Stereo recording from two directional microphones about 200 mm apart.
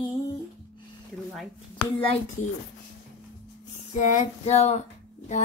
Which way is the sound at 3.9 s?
40° left (ahead or behind).